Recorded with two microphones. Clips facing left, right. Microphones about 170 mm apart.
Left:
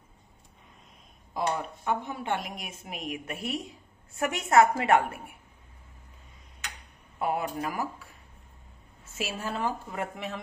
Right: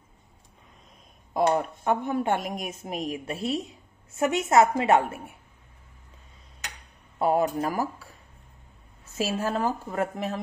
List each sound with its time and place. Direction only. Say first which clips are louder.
1.9 s a woman's voice: right 5 dB; 50° right (ahead or behind); by 5.3 s 25° right (ahead or behind)
7.2 s a woman's voice: right 6 dB; 40° right (ahead or behind)
9.1 s a woman's voice: right 6 dB; 40° right (ahead or behind)